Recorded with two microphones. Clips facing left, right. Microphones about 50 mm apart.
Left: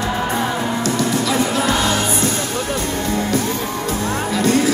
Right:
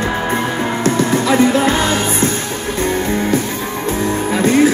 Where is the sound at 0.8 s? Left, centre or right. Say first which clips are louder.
Right 6 dB; right.